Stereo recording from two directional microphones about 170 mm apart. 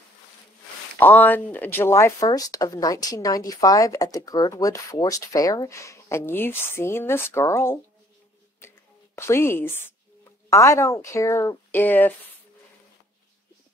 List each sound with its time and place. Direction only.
0.9 s speech: 10° left (ahead or behind)
8.5 s a sound: 15° left (ahead or behind)
10.5 s speech: 15° left (ahead or behind)